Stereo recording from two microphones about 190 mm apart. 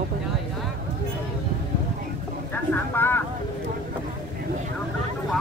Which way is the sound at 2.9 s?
10° left (ahead or behind).